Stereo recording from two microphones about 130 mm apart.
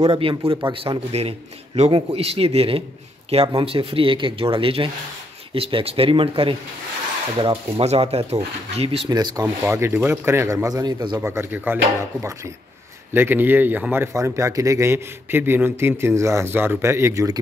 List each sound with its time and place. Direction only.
0.1 s speech: 45° right (ahead or behind)
7.8 s speech: 55° right (ahead or behind)
9.1 s speech: 30° right (ahead or behind)
9.7 s speech: 20° right (ahead or behind)
11.2 s speech: 15° right (ahead or behind)